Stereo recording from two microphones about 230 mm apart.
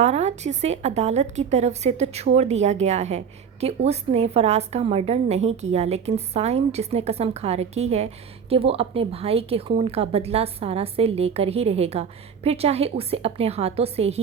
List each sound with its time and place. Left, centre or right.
0.0 s a woman's voice: right